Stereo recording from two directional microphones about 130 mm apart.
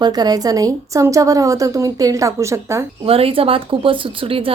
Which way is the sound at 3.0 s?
45° right (ahead or behind).